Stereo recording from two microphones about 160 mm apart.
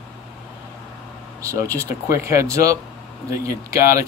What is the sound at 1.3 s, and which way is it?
Speech, 20° right (ahead or behind).